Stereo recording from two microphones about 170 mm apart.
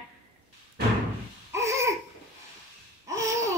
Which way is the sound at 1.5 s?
15° right (ahead or behind).